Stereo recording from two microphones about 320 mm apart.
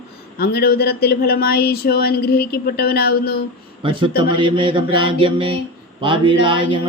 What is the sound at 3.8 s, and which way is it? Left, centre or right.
Speech, centre.